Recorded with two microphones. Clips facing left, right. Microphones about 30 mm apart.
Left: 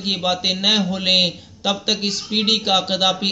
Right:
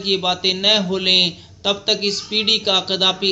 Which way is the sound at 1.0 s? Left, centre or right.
Right.